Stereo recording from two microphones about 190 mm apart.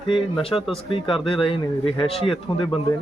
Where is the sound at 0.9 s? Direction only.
25° left (ahead or behind).